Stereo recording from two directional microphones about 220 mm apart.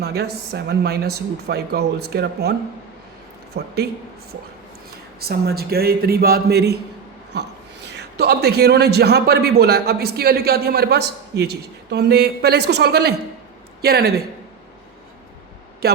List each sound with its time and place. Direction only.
0.0 s a man's voice: 45° right (ahead or behind)
5.2 s a man's voice: 45° right (ahead or behind)
7.9 s a man's voice: 50° right (ahead or behind)
15.8 s a man's voice: 45° right (ahead or behind)